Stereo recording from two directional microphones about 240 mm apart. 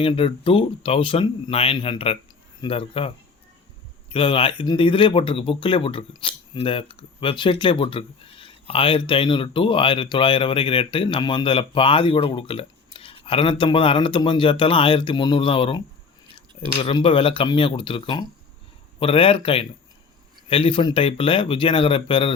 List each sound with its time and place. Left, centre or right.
0.0 s speech: left
4.1 s speech: left
16.8 s speech: left